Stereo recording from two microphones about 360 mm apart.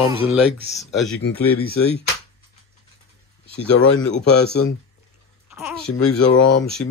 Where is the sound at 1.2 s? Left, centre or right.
Left.